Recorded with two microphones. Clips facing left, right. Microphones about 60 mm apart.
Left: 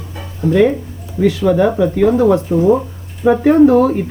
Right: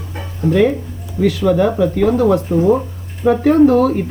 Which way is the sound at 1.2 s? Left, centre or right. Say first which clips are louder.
Left 1 dB; centre.